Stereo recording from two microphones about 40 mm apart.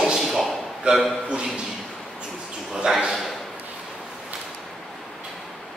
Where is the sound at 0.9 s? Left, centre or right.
Right.